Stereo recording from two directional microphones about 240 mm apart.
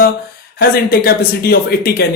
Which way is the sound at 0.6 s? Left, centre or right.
Left.